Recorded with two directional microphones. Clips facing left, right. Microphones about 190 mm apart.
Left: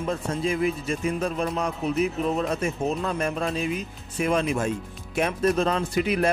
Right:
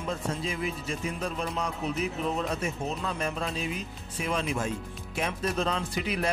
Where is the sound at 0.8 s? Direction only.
55° left (ahead or behind).